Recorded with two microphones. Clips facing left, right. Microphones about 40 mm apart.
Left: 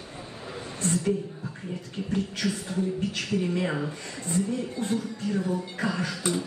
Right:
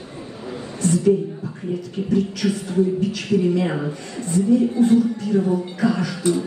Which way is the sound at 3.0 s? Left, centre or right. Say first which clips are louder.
Right 8 dB; left.